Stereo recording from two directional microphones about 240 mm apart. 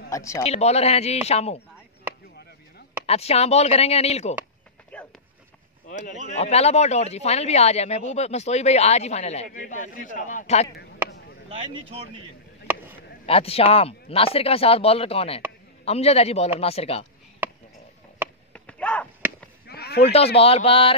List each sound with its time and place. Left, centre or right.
0.1 s speech: centre
0.4 s speech: left
3.1 s speech: left
4.9 s a sound: centre
5.9 s speech: left
13.3 s speech: left
18.5 s a sound: centre
19.6 s a sound: left
20.0 s speech: left